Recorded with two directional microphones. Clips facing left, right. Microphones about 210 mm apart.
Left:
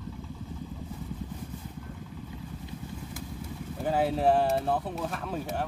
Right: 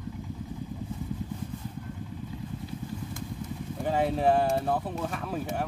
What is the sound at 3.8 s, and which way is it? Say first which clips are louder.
Speech: even; centre (ahead or behind).